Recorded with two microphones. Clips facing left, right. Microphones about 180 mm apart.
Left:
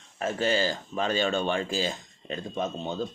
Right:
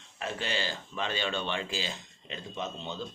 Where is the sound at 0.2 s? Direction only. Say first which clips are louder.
Left 8 dB; 40° left (ahead or behind).